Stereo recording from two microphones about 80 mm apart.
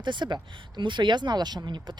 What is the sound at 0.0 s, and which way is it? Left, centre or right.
Speech, right.